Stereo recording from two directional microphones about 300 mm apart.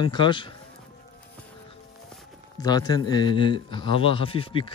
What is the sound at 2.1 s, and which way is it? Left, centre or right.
Speech, centre.